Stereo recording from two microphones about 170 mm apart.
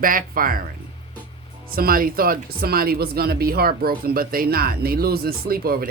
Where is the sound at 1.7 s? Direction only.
60° right (ahead or behind).